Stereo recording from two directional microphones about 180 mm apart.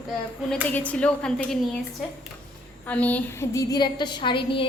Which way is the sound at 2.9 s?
10° left (ahead or behind).